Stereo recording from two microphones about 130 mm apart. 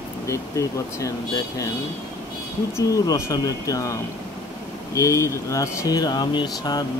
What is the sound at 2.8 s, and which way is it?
Speech, 25° left (ahead or behind).